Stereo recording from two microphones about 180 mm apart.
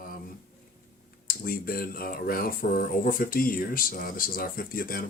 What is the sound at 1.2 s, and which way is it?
Speech, 55° left (ahead or behind).